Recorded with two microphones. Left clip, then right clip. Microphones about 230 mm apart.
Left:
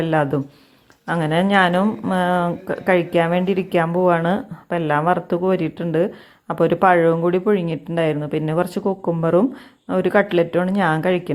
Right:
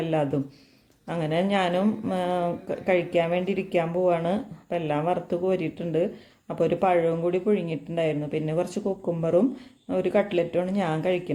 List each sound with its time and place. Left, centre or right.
0.0 s speech: left